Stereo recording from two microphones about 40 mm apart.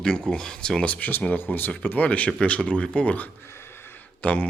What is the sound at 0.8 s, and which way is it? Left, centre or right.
Speech, left.